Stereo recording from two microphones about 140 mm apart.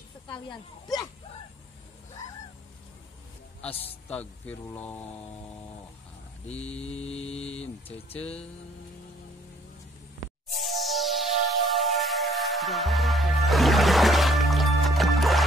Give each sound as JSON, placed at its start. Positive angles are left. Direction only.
{"t": 0.3, "sound": "speech", "side_deg": 30}
{"t": 3.7, "sound": "mantra", "side_deg": 45}
{"t": 4.1, "sound": "speech", "side_deg": 10}
{"t": 7.0, "sound": "mantra", "side_deg": 50}
{"t": 10.6, "sound": "music", "side_deg": 0}